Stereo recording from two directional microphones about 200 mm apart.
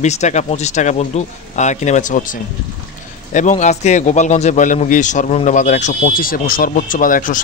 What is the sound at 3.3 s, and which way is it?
Speech, 35° left (ahead or behind).